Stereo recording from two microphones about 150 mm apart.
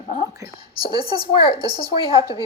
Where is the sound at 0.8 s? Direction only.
35° left (ahead or behind).